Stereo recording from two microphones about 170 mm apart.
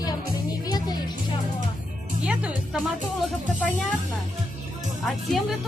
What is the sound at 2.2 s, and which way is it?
Speech, 5° right (ahead or behind).